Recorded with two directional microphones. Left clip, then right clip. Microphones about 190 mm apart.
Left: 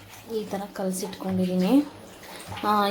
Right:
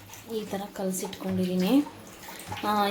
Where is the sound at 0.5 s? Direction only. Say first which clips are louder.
Left 2 dB; 5° left (ahead or behind).